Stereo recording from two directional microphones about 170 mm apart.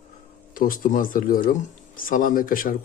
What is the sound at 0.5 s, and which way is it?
Speech, 55° left (ahead or behind).